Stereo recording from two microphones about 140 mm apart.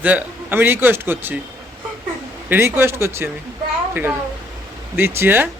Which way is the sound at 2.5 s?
15° right (ahead or behind).